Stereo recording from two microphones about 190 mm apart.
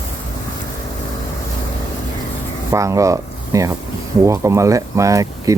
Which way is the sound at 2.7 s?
15° right (ahead or behind).